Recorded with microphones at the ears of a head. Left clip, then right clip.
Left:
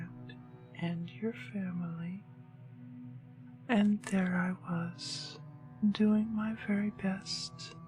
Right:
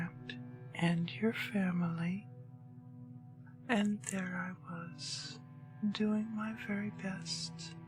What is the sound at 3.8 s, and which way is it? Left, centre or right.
Speech, left.